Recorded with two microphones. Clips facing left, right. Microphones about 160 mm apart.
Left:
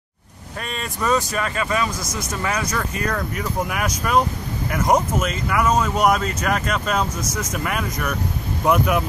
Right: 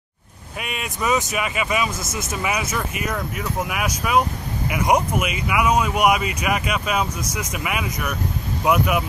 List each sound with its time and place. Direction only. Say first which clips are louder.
0.6 s speech: even; 10° right (ahead or behind)
2.0 s speech: even; 25° right (ahead or behind)
2.3 s speech: even; 10° right (ahead or behind)